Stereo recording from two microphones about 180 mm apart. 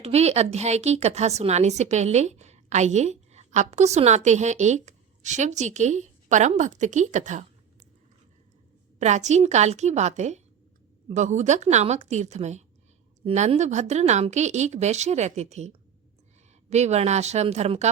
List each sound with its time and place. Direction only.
0.0 s a woman's voice: 35° right (ahead or behind)
9.0 s a woman's voice: 40° right (ahead or behind)